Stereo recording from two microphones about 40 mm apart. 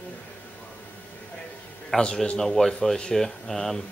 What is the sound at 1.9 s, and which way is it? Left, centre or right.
Speech, centre.